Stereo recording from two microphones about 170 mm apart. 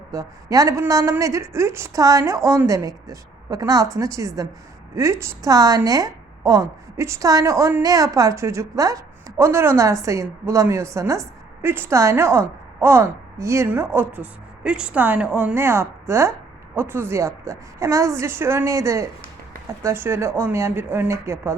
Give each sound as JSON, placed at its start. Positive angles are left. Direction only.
{"t": 0.1, "sound": "a woman's voice", "side_deg": -20}